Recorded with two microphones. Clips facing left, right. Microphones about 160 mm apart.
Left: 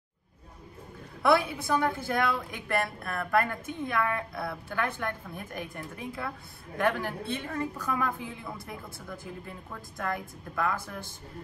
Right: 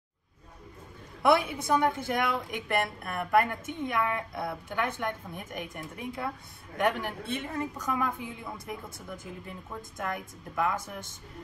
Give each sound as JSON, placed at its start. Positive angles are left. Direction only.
{"t": 1.2, "sound": "a woman's voice", "side_deg": -20}
{"t": 9.8, "sound": "a woman's voice", "side_deg": -20}